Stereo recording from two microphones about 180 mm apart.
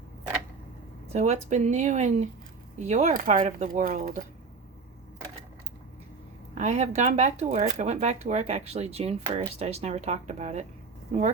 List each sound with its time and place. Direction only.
1.1 s speech: 40° right (ahead or behind)
6.5 s speech: 40° right (ahead or behind)